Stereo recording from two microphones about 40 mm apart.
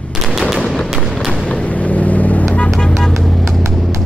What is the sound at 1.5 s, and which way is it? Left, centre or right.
Vehicle, left.